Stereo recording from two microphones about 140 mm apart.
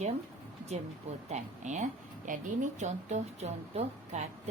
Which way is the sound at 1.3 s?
55° right (ahead or behind).